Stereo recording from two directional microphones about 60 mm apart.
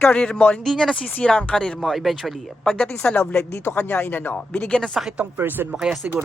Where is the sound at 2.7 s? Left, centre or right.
Centre.